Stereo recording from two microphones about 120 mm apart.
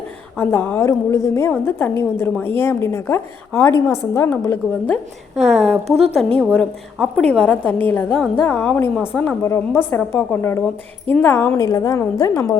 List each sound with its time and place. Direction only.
0.3 s a woman's voice: 15° left (ahead or behind)
5.4 s a woman's voice: centre (ahead or behind)
6.1 s a woman's voice: 10° left (ahead or behind)
9.4 s a woman's voice: 20° left (ahead or behind)